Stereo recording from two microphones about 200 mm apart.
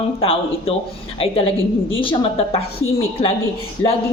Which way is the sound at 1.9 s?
25° left (ahead or behind).